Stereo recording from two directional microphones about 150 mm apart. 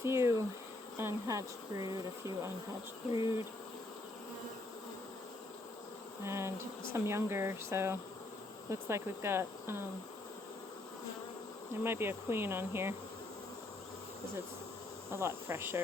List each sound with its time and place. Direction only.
0.0 s insect: 20° right (ahead or behind)
0.9 s speech: 20° right (ahead or behind)
3.1 s insect: 40° left (ahead or behind)
6.2 s speech: 15° right (ahead or behind)
11.8 s speech: 15° right (ahead or behind)
15.1 s speech: 15° right (ahead or behind)